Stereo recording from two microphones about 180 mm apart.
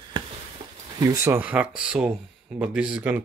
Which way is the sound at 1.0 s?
15° right (ahead or behind).